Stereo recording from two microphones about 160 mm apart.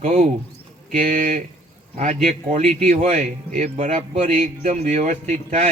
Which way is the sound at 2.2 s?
45° right (ahead or behind).